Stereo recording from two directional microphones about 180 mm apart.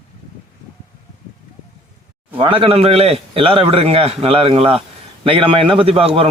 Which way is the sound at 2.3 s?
30° right (ahead or behind).